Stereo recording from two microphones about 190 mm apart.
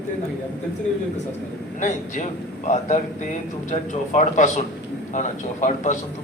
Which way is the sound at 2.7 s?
40° left (ahead or behind).